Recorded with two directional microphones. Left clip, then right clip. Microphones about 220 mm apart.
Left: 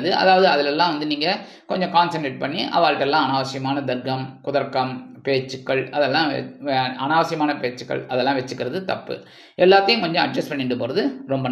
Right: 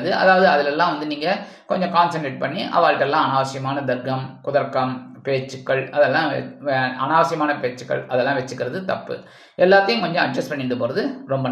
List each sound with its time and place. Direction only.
0.0 s speech: 25° left (ahead or behind)